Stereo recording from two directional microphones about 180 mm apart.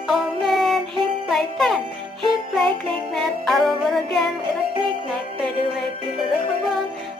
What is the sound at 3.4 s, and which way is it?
Music, centre (ahead or behind).